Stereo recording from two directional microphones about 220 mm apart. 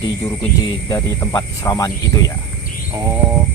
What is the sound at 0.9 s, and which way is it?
Speech, 15° left (ahead or behind).